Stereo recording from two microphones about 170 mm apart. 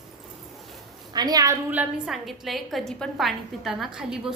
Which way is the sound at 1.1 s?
25° right (ahead or behind).